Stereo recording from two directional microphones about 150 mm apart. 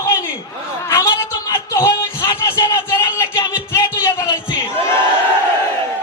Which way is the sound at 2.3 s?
15° left (ahead or behind).